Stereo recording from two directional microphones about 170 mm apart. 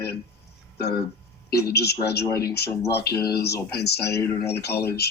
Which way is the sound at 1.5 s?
70° left (ahead or behind).